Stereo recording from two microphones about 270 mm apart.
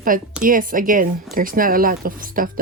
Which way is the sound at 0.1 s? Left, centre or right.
Right.